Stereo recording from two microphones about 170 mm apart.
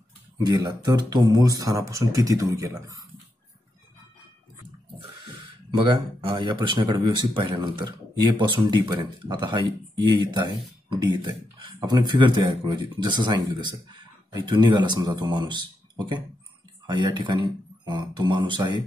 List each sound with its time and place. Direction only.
0.4 s speech: 25° right (ahead or behind)
5.9 s speech: 30° right (ahead or behind)